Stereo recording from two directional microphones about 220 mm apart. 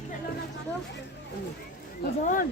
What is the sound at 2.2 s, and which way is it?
Speech, 35° left (ahead or behind).